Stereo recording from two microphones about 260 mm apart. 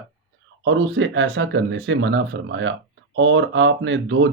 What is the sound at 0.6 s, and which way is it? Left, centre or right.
Speech, right.